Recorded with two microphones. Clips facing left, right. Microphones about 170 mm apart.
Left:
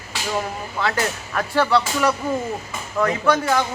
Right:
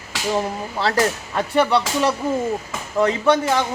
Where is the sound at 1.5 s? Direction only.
20° right (ahead or behind).